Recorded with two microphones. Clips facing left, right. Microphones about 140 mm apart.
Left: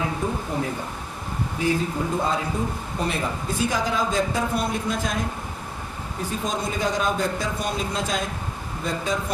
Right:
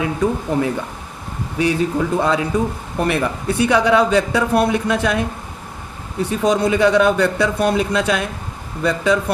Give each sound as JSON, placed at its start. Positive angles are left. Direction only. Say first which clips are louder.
{"t": 0.2, "sound": "a man's voice", "louder": "right 11 dB", "side_deg": -75}
{"t": 1.5, "sound": "a man's voice", "louder": "right 7 dB", "side_deg": -75}
{"t": 3.0, "sound": "a man's voice", "louder": "right 8 dB", "side_deg": -65}